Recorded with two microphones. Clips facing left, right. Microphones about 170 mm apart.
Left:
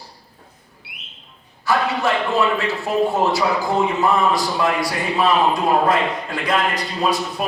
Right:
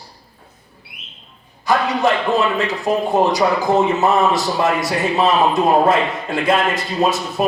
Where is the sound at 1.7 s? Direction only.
20° right (ahead or behind).